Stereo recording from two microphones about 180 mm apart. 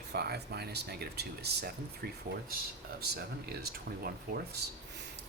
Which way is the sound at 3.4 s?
60° right (ahead or behind).